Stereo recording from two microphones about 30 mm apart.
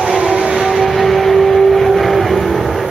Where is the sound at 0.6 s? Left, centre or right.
Centre.